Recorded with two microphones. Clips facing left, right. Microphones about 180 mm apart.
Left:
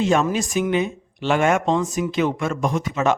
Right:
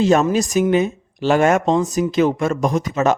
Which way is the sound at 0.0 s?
40° right (ahead or behind).